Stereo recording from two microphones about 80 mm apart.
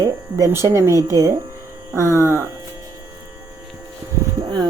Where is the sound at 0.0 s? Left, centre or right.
Right.